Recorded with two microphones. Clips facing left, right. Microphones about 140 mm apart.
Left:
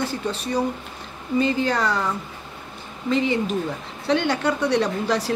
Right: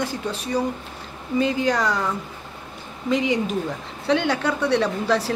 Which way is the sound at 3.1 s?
10° right (ahead or behind).